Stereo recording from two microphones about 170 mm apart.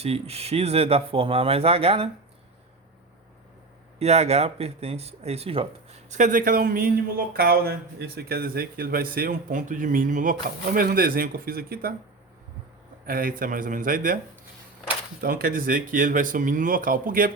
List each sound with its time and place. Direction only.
0.0 s speech: 35° right (ahead or behind)
3.9 s speech: 40° right (ahead or behind); by 11.9 s 60° right (ahead or behind)
13.1 s speech: 55° right (ahead or behind)
15.2 s speech: 60° right (ahead or behind)